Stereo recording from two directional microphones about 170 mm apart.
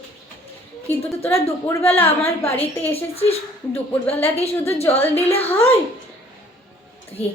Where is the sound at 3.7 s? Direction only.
15° left (ahead or behind).